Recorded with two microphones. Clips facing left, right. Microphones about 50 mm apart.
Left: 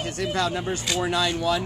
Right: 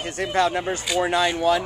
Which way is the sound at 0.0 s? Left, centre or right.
Right.